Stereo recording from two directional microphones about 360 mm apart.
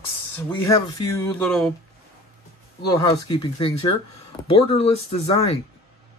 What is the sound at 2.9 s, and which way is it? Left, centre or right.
Speech, centre.